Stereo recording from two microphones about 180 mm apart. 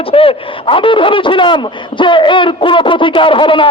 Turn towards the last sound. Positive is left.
turn(degrees=30)  # may be behind; listen again after turning